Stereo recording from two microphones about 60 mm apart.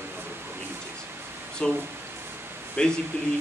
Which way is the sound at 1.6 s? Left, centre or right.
Centre.